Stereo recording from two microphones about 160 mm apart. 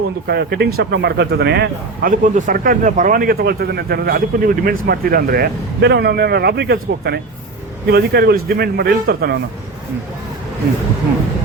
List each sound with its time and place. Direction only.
0.3 s speech: 90° right